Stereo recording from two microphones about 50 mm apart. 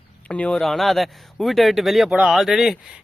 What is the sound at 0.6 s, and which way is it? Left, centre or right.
Speech, centre.